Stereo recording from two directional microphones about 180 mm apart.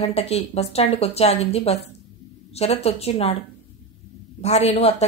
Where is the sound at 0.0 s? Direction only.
35° left (ahead or behind).